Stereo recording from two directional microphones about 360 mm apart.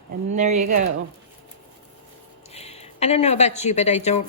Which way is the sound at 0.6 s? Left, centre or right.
Right.